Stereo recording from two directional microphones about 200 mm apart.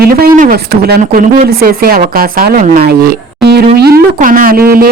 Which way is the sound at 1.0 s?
40° right (ahead or behind).